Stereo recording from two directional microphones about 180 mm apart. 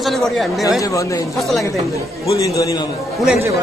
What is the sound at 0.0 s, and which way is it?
Speech, centre (ahead or behind).